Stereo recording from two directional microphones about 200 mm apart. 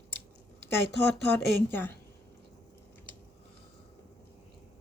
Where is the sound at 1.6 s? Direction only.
10° left (ahead or behind).